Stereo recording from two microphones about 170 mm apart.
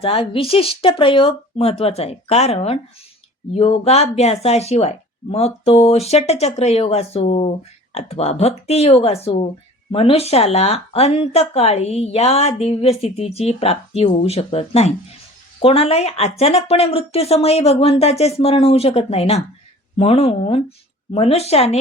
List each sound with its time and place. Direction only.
0.0 s speech: 35° left (ahead or behind)